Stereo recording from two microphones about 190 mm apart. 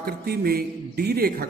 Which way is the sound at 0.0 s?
55° right (ahead or behind).